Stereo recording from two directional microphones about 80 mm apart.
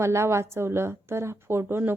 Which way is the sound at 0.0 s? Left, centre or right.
Right.